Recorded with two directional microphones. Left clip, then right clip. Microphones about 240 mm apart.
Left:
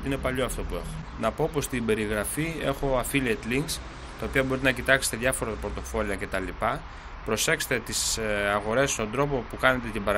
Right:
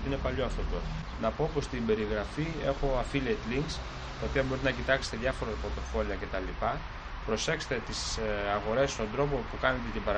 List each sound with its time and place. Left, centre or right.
0.1 s speech: left